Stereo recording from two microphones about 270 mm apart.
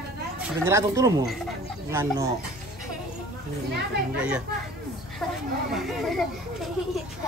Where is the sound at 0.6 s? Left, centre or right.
Centre.